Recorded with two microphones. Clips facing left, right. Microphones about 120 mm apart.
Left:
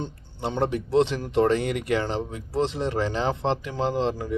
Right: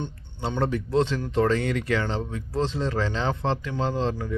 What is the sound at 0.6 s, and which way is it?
A man's voice, 25° left (ahead or behind).